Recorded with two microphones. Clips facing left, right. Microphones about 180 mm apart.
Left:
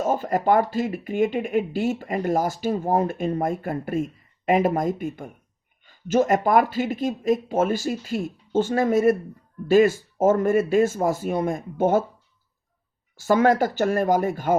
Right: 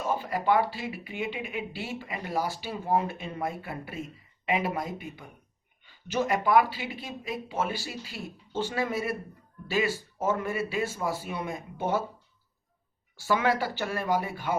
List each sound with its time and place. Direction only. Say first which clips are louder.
0.0 s speech: left 7 dB; 45° left (ahead or behind)
13.1 s speech: left 8 dB; 45° left (ahead or behind)